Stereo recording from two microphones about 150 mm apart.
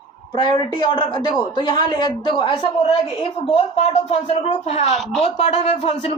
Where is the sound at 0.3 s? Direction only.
30° left (ahead or behind).